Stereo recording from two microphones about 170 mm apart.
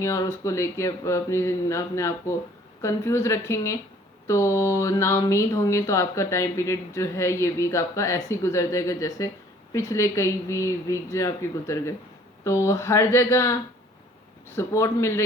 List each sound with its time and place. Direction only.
0.0 s speech: 15° left (ahead or behind)